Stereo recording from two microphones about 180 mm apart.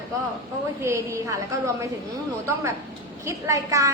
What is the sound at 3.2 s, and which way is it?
Speech, 15° right (ahead or behind).